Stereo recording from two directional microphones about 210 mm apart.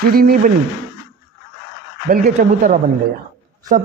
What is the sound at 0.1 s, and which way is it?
Speech, 45° right (ahead or behind).